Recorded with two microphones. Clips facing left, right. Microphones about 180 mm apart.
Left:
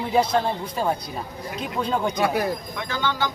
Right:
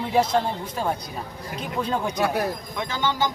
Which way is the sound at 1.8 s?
5° right (ahead or behind).